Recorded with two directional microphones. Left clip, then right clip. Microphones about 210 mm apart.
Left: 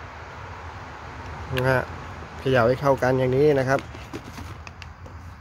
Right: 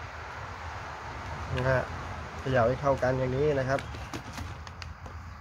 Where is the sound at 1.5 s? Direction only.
45° left (ahead or behind).